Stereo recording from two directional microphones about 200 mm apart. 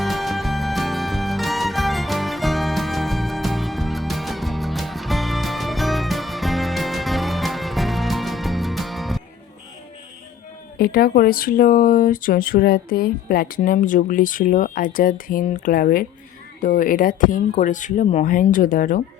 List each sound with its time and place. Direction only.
0.0 s music: centre (ahead or behind)
10.8 s speech: 50° left (ahead or behind)